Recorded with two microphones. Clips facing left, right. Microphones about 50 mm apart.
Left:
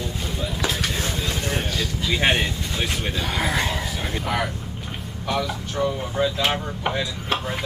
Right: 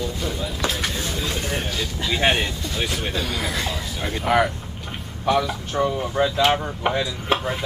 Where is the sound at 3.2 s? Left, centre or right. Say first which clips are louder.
Left 2 dB; left.